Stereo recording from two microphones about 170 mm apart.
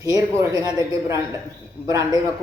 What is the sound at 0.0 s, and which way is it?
Speech, 20° right (ahead or behind).